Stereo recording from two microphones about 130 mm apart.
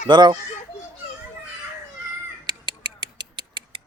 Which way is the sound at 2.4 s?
35° right (ahead or behind).